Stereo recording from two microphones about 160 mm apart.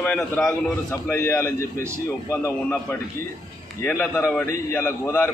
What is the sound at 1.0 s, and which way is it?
A man's voice, 15° left (ahead or behind).